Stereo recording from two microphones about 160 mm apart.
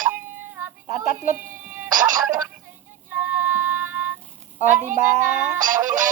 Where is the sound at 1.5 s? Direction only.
15° right (ahead or behind).